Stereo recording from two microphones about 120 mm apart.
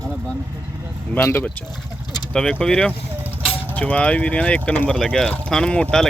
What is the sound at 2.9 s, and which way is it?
Vehicle, 15° right (ahead or behind).